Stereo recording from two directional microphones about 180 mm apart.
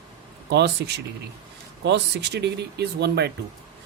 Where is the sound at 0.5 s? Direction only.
70° right (ahead or behind).